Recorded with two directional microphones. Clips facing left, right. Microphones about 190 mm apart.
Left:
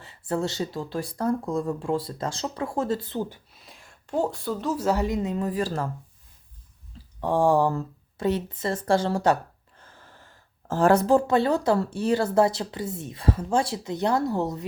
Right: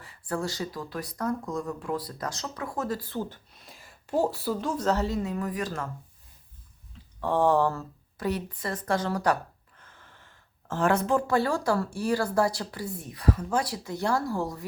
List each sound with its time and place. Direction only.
0.0 s speech: 25° left (ahead or behind)
3.6 s a woman's voice: centre (ahead or behind); by 5.9 s 30° left (ahead or behind)
7.2 s speech: 15° left (ahead or behind)